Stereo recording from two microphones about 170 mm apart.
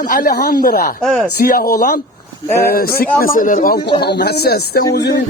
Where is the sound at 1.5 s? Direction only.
60° left (ahead or behind).